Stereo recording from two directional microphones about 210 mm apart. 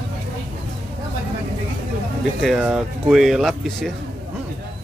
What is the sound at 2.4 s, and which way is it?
Speech, centre (ahead or behind).